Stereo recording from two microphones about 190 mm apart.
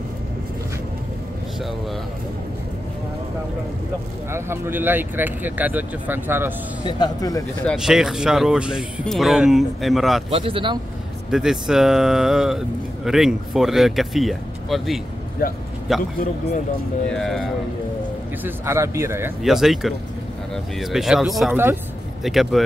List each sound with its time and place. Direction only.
4.3 s speech: 10° right (ahead or behind)
6.9 s speech: 20° left (ahead or behind)
7.6 s speech: 5° right (ahead or behind)
10.3 s speech: 30° right (ahead or behind)
11.2 s speech: 5° right (ahead or behind)
15.4 s a man's voice: 50° left (ahead or behind)
15.9 s speech: centre (ahead or behind)
17.1 s speech: centre (ahead or behind)
18.4 s speech: 15° right (ahead or behind)
19.4 s speech: centre (ahead or behind)